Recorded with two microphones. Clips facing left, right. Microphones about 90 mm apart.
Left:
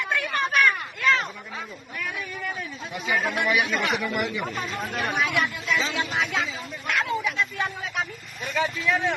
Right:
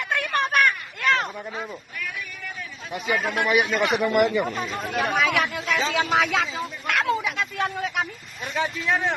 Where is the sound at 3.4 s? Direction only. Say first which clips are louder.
Right 3 dB; 25° right (ahead or behind).